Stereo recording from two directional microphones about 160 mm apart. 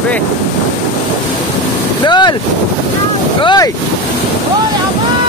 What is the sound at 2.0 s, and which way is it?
Speech, 30° left (ahead or behind).